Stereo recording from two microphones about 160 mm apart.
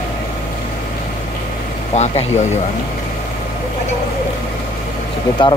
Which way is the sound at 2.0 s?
45° left (ahead or behind).